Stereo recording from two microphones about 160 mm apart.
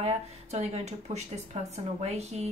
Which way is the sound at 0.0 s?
40° right (ahead or behind).